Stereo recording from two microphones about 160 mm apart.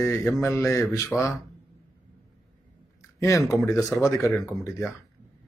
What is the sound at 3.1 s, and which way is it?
A man's voice, 20° left (ahead or behind).